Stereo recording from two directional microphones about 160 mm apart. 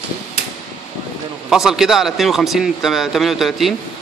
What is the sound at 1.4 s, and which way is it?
A man's voice, centre (ahead or behind).